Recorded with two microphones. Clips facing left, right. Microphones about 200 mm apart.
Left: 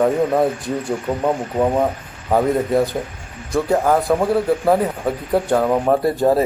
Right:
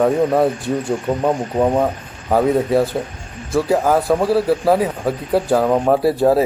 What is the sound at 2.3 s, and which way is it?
A man's voice, 5° right (ahead or behind).